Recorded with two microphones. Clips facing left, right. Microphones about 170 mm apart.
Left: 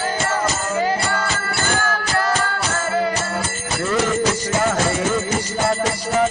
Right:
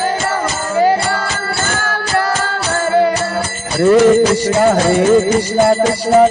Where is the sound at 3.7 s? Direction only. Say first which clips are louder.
Right 12 dB; 35° right (ahead or behind).